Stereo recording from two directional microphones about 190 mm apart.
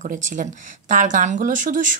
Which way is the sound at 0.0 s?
40° right (ahead or behind).